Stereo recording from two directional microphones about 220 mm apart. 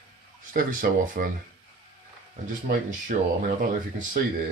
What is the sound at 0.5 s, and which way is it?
Speech, 40° right (ahead or behind).